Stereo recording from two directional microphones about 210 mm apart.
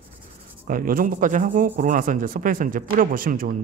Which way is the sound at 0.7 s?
40° right (ahead or behind).